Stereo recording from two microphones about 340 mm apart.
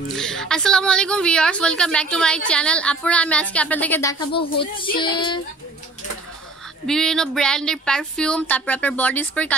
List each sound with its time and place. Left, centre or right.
0.1 s a woman's voice: centre
4.9 s child singing: centre
6.9 s a woman's voice: centre